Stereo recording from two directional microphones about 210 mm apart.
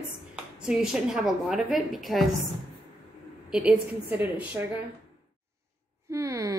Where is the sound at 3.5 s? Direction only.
5° right (ahead or behind).